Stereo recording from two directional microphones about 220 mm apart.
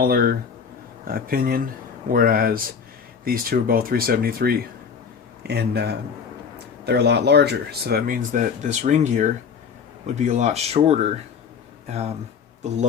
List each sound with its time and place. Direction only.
0.0 s speech: 45° right (ahead or behind)